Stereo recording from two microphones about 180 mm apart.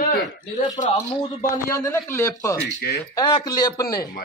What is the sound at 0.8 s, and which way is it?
Speech, 45° left (ahead or behind).